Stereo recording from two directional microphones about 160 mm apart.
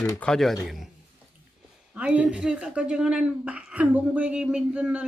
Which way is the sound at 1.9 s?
5° right (ahead or behind).